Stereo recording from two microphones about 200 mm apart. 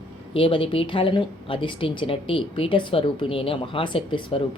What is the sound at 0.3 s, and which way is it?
A woman's voice, 25° left (ahead or behind).